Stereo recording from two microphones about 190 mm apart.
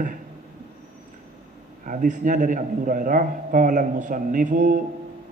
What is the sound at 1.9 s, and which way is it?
A man's voice, 45° right (ahead or behind).